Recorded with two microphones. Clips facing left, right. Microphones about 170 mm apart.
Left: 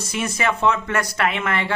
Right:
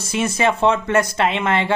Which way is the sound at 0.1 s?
25° right (ahead or behind).